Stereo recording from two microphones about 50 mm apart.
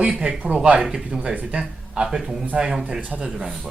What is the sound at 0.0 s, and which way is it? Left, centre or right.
Speech, centre.